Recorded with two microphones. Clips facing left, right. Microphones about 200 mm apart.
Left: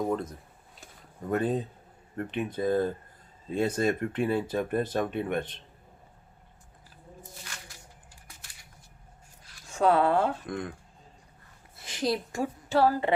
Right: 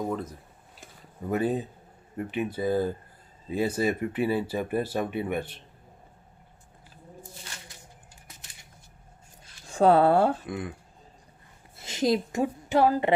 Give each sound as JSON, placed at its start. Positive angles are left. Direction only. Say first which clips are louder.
{"t": 0.1, "sound": "speech", "louder": "left 2 dB", "side_deg": -5}
{"t": 9.5, "sound": "speech", "louder": "right 4 dB", "side_deg": -30}
{"t": 10.4, "sound": "speech", "louder": "even", "side_deg": -5}
{"t": 11.8, "sound": "a woman's voice", "louder": "right 4 dB", "side_deg": -25}